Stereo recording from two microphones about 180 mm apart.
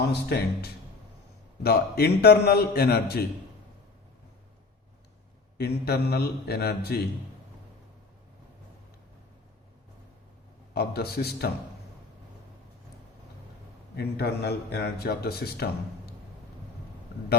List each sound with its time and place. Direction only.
0.1 s a man's voice: 60° left (ahead or behind)
5.5 s a man's voice: 60° left (ahead or behind)
10.8 s a man's voice: 60° left (ahead or behind)
13.9 s a man's voice: 65° left (ahead or behind)